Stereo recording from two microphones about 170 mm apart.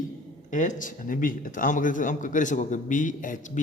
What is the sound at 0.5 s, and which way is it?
Speech, 45° left (ahead or behind).